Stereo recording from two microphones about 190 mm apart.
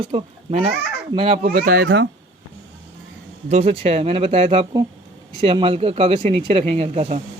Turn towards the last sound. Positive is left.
turn(degrees=-30)  # may be behind; listen again after turning